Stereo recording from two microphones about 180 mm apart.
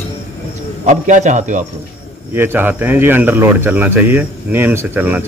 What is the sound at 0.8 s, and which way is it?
Speech, 40° right (ahead or behind).